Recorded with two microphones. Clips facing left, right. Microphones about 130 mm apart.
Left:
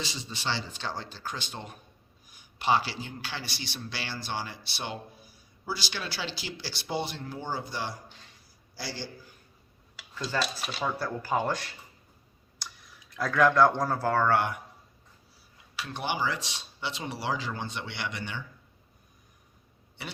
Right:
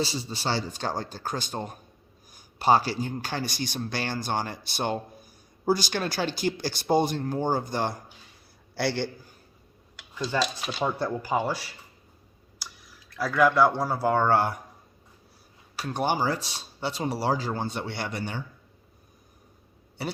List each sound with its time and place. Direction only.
0.0 s a man's voice: 35° right (ahead or behind)
8.7 s a man's voice: 65° right (ahead or behind)
10.4 s speech: centre (ahead or behind)
10.8 s speech: 20° right (ahead or behind)
12.5 s clicking: centre (ahead or behind)
13.1 s speech: 5° right (ahead or behind); by 14.6 s 35° right (ahead or behind)
15.7 s speech: 40° right (ahead or behind)
20.0 s speech: 40° right (ahead or behind)